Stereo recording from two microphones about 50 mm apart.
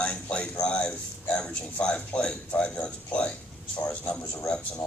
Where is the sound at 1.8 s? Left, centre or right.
Left.